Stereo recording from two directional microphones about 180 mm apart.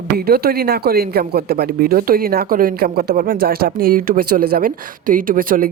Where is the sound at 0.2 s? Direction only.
60° right (ahead or behind).